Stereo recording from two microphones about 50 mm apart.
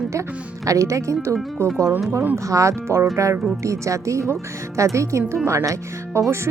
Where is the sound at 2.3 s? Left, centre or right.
Right.